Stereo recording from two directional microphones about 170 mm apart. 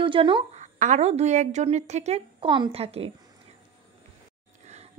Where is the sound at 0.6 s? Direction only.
45° right (ahead or behind).